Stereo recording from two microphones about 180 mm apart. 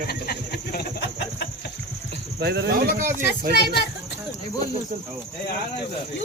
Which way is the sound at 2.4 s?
65° right (ahead or behind).